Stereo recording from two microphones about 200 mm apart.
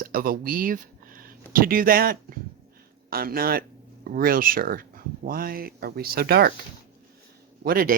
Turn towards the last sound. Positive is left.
turn(degrees=-45)  # may be behind; listen again after turning